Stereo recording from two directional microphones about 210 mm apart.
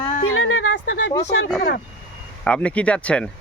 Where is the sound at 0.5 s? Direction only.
70° left (ahead or behind).